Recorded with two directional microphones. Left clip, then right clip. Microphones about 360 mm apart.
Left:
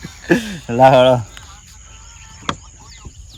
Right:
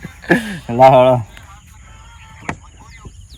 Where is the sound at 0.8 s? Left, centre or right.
Centre.